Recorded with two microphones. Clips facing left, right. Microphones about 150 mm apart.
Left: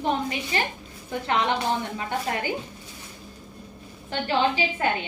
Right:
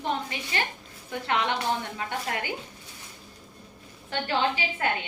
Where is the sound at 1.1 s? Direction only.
35° left (ahead or behind).